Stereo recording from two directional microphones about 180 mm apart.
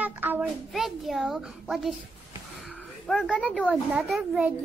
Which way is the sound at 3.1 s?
Centre (ahead or behind).